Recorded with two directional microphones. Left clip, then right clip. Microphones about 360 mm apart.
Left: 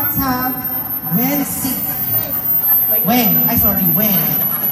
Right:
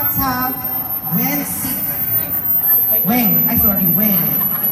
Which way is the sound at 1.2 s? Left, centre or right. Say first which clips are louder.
Left 3 dB; left.